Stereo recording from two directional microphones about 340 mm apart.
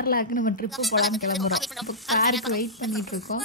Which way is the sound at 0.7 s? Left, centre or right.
Centre.